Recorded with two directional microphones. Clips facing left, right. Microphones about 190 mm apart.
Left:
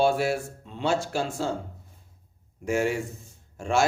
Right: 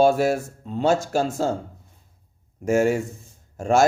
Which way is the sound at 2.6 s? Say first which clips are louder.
Right 6 dB; 45° right (ahead or behind).